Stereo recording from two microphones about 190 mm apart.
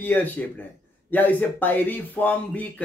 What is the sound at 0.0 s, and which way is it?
Speech, 10° left (ahead or behind).